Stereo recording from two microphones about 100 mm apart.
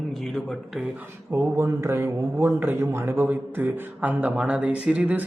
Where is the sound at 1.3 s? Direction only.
30° right (ahead or behind).